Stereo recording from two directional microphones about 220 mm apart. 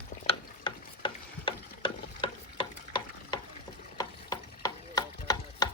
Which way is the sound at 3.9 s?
15° left (ahead or behind).